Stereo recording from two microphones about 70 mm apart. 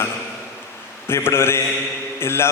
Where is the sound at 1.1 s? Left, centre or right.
Left.